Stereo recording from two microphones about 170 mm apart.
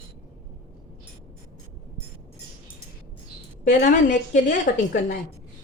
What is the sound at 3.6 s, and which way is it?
Speech, 50° left (ahead or behind).